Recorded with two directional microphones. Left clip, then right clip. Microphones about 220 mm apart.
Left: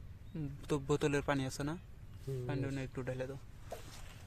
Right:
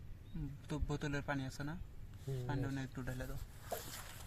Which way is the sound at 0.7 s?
50° left (ahead or behind).